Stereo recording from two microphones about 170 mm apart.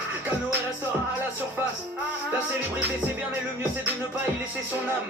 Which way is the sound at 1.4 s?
10° right (ahead or behind).